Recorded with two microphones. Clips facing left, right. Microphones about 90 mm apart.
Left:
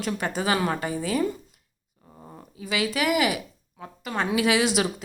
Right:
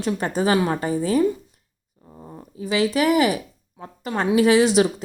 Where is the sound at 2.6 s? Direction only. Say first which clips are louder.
Right 6 dB; 30° right (ahead or behind).